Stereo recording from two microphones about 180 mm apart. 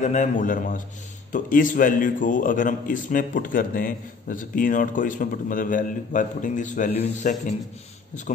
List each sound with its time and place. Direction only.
0.0 s a man's voice: 40° left (ahead or behind)